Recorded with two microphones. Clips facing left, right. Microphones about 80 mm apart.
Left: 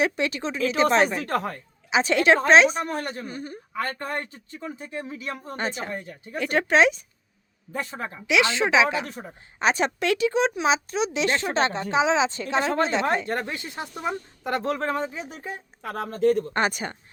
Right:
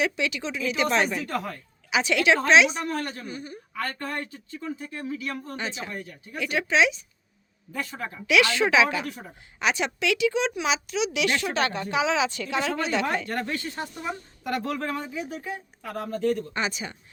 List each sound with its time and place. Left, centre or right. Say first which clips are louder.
0.0 s a woman's voice: left 2 dB; left
2.8 s speech: even; left
3.2 s speech: left 2 dB; left
3.7 s speech: left 2 dB; left
5.5 s speech: left 4 dB; left
5.9 s speech: left 3 dB; left
6.4 s speech: left 3 dB; left
7.7 s speech: left 2 dB; left
15.8 s speech: left 4 dB; left
16.2 s speech: left 6 dB; left